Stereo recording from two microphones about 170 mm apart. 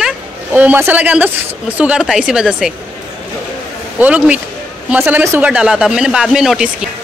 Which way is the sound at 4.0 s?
10° right (ahead or behind).